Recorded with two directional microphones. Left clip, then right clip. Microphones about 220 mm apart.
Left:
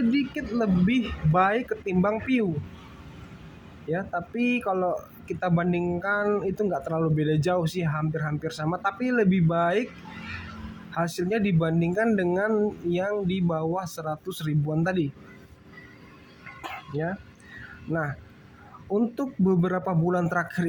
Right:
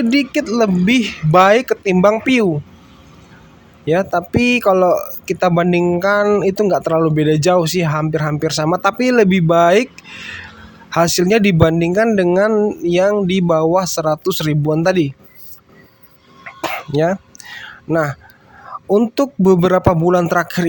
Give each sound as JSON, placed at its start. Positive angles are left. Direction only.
{"t": 0.1, "sound": "a man's voice", "side_deg": -50}
{"t": 3.8, "sound": "a man's voice", "side_deg": -45}
{"t": 10.9, "sound": "a man's voice", "side_deg": -45}
{"t": 16.6, "sound": "chicken", "side_deg": -50}
{"t": 17.9, "sound": "a man's voice", "side_deg": -45}